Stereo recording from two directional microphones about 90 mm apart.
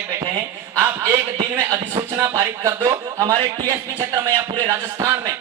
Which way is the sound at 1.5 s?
30° right (ahead or behind).